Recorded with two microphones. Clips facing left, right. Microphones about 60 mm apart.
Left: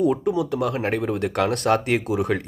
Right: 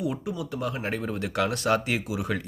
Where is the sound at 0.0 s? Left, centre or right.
Left.